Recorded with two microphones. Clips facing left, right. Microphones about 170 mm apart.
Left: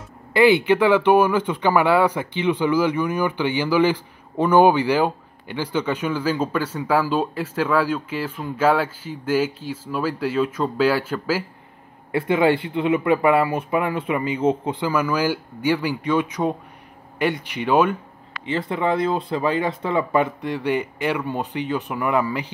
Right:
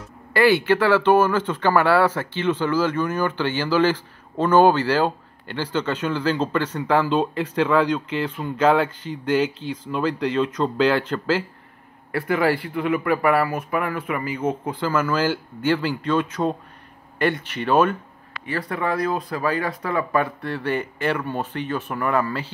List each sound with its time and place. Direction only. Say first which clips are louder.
0.3 s speech: left 2 dB; 20° left (ahead or behind)
12.1 s speech: left 3 dB; 20° left (ahead or behind)
14.9 s speech: even; 10° left (ahead or behind)